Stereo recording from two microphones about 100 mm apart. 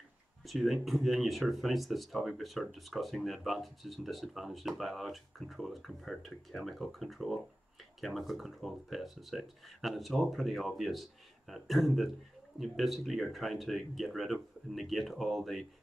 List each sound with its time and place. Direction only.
0.5 s speech: centre (ahead or behind)